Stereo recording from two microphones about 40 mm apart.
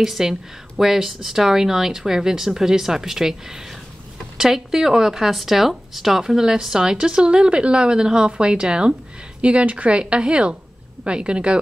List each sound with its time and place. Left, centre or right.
0.0 s speech: centre
4.4 s a woman's voice: centre
9.4 s a woman's voice: right